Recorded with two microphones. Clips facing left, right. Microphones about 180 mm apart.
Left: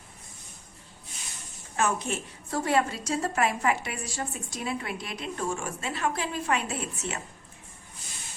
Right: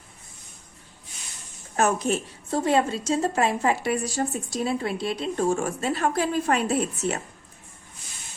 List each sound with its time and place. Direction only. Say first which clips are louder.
1.7 s a woman's voice: right 5 dB; 40° right (ahead or behind)
2.5 s a woman's voice: right 4 dB; 25° right (ahead or behind)